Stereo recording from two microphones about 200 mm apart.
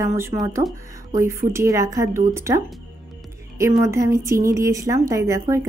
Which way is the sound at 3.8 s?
15° right (ahead or behind).